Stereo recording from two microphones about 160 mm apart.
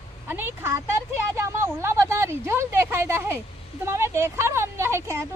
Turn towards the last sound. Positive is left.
turn(degrees=-15)  # may be behind; listen again after turning